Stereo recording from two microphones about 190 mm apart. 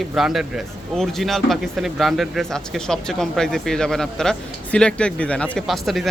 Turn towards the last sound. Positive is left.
turn(degrees=0)  # may be behind; listen again after turning